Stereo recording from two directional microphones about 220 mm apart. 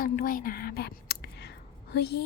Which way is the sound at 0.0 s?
40° left (ahead or behind).